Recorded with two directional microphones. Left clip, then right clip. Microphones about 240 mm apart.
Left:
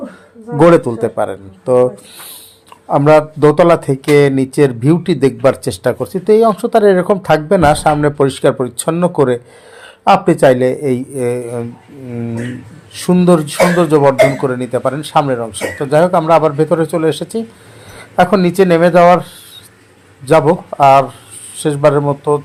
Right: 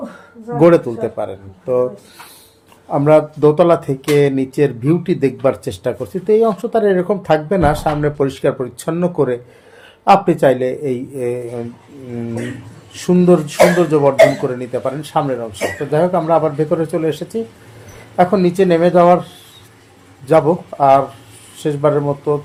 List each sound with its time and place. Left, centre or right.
0.6 s speech: left
2.9 s speech: left
12.9 s speech: centre
20.2 s speech: centre